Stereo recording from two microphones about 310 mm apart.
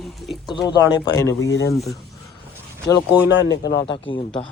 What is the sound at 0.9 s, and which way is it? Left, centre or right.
Speech, centre.